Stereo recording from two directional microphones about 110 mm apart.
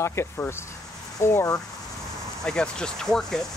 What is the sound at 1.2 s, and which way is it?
Speech, 30° left (ahead or behind).